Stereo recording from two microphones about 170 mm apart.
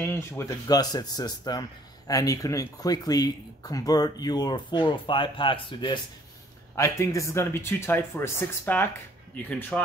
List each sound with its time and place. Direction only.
0.1 s speech: 20° left (ahead or behind)
6.7 s speech: 20° left (ahead or behind)